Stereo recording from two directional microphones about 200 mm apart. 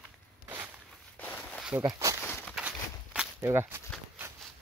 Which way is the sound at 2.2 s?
10° left (ahead or behind).